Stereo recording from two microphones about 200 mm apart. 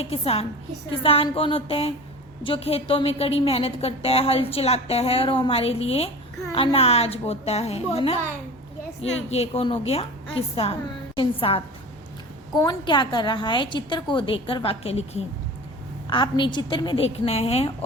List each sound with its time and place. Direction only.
0.0 s a woman's voice: 30° left (ahead or behind)
9.3 s a woman's voice: 30° left (ahead or behind)
12.6 s a woman's voice: 25° left (ahead or behind)